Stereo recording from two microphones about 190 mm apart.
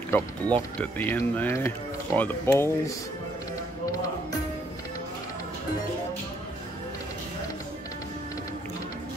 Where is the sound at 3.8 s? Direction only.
20° left (ahead or behind).